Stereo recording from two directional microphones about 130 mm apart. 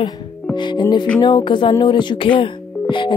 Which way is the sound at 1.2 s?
35° left (ahead or behind).